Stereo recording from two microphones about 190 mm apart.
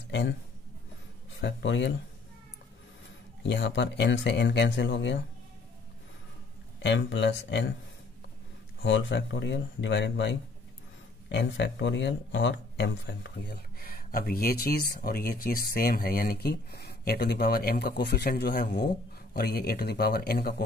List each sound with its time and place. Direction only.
0.1 s speech: 70° left (ahead or behind)
1.4 s speech: 70° left (ahead or behind)
3.4 s speech: 70° left (ahead or behind)
6.8 s speech: 70° left (ahead or behind)
8.8 s speech: 75° left (ahead or behind); by 20.6 s 55° left (ahead or behind)